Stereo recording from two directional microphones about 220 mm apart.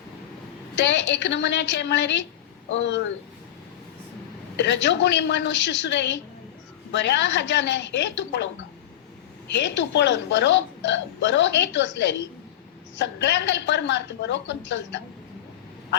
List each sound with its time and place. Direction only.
0.8 s speech: 55° left (ahead or behind)
4.5 s speech: 55° left (ahead or behind)
9.5 s speech: 55° left (ahead or behind)